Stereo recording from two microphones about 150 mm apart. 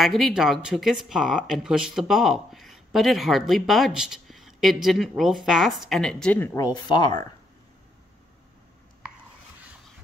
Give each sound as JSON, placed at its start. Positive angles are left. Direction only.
{"t": 0.0, "sound": "speech", "side_deg": 0}
{"t": 6.5, "sound": "speech", "side_deg": 25}